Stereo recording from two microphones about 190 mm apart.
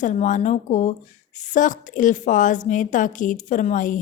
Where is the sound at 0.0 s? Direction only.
40° left (ahead or behind).